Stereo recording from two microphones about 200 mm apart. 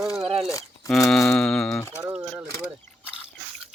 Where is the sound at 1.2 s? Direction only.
10° left (ahead or behind).